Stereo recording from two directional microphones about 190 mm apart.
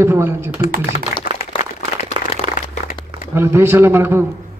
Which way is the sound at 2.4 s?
30° right (ahead or behind).